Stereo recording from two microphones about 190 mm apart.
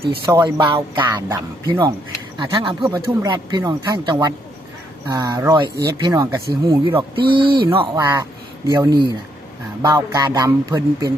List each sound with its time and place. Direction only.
0.0 s speech: 30° right (ahead or behind)
8.0 s speech: 15° right (ahead or behind)